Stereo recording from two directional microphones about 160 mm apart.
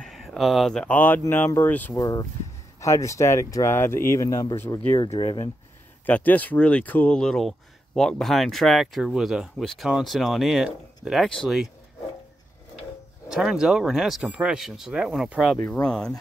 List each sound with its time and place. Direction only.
0.0 s speech: centre (ahead or behind)
2.0 s speech: 20° left (ahead or behind)
5.1 s speech: 35° left (ahead or behind)
6.0 s speech: 10° left (ahead or behind)
13.3 s speech: 5° right (ahead or behind)
15.5 s speech: 10° left (ahead or behind)